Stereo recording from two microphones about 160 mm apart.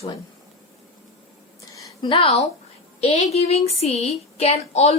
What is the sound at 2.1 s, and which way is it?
A woman's voice, 40° left (ahead or behind).